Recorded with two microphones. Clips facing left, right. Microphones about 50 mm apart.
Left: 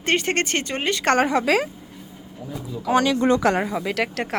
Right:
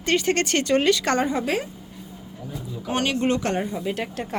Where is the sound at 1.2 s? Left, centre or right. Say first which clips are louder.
Left 5 dB; left.